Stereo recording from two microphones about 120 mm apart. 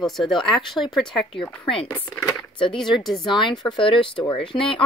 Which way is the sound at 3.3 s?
40° left (ahead or behind).